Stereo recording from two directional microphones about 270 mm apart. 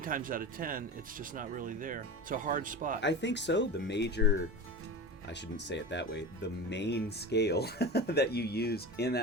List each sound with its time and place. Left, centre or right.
0.0 s speech: right
3.0 s speech: left
5.5 s speech: left